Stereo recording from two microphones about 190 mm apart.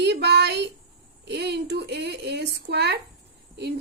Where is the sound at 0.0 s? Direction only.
60° right (ahead or behind).